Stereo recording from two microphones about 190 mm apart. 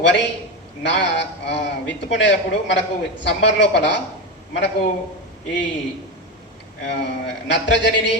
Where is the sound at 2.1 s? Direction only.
65° left (ahead or behind).